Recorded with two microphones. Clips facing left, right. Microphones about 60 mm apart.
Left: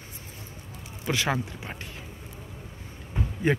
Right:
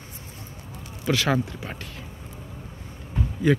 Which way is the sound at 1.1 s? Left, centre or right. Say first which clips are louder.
Right 4 dB; centre.